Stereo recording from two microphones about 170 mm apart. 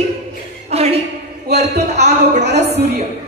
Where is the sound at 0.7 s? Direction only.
35° right (ahead or behind).